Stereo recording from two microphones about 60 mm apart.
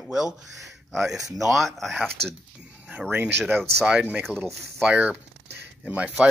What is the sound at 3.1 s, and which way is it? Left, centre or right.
Speech, right.